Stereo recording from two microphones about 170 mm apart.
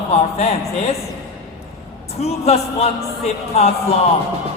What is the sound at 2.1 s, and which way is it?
Speech, 40° left (ahead or behind).